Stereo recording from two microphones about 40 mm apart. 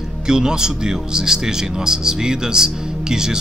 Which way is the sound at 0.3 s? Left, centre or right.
Centre.